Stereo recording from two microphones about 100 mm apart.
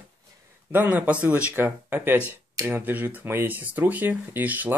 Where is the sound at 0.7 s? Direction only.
15° right (ahead or behind).